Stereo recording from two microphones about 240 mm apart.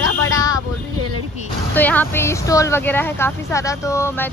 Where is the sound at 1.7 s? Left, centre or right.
Centre.